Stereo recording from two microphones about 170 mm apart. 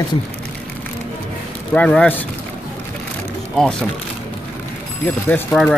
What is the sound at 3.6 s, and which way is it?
Speech, 5° left (ahead or behind).